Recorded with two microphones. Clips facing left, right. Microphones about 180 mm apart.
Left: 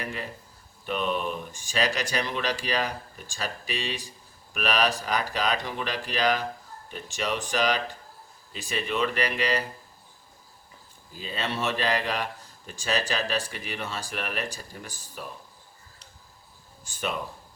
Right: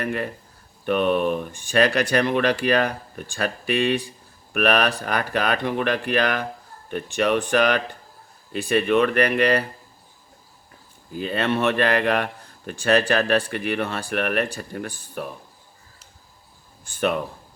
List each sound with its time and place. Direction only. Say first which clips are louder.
0.0 s a man's voice: right 8 dB; 60° right (ahead or behind)
11.1 s a man's voice: right 9 dB; 60° right (ahead or behind)
16.8 s a man's voice: right 9 dB; 60° right (ahead or behind)